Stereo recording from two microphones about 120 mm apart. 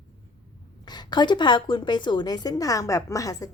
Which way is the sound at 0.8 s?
35° left (ahead or behind).